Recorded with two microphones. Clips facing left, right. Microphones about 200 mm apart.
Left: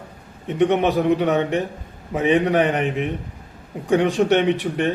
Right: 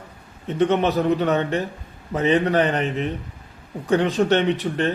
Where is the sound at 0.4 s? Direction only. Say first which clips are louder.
Left 1 dB; 15° left (ahead or behind).